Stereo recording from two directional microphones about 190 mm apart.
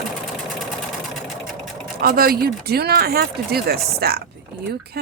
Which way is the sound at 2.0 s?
50° right (ahead or behind).